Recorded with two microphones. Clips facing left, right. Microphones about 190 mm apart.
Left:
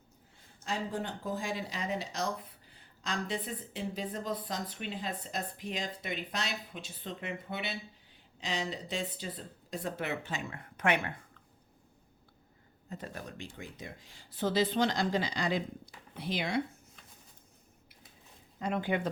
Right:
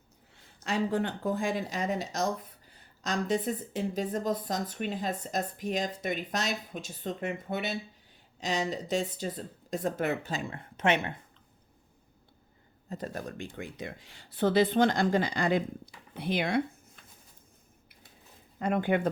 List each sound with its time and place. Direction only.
0.6 s speech: 70° right (ahead or behind); by 11.2 s 25° right (ahead or behind)
12.9 s speech: 40° right (ahead or behind); by 16.6 s 55° right (ahead or behind)
18.6 s speech: 55° right (ahead or behind)